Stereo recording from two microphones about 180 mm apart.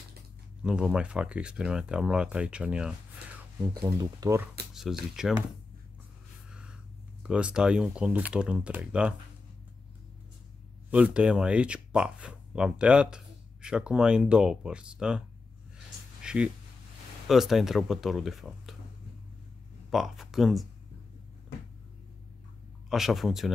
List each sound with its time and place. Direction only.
0.7 s speech: 5° right (ahead or behind)
3.8 s speech: 20° right (ahead or behind)
4.7 s speech: centre (ahead or behind)
6.5 s a sound: 5° right (ahead or behind)
7.2 s speech: 5° right (ahead or behind)
10.9 s speech: 5° right (ahead or behind)
16.2 s a sound: 5° right (ahead or behind)
17.3 s speech: centre (ahead or behind)
19.9 s speech: centre (ahead or behind)
22.8 s speech: centre (ahead or behind)